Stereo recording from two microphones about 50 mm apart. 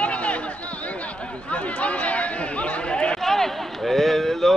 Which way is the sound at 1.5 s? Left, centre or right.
Left.